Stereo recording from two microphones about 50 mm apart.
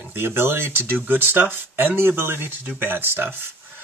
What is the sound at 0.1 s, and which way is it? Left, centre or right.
Speech, right.